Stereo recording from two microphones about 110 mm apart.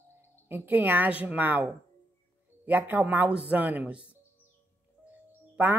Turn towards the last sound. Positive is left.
turn(degrees=-15)  # may be behind; listen again after turning